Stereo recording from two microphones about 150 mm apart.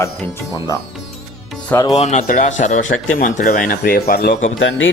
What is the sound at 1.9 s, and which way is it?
Speech, 50° left (ahead or behind).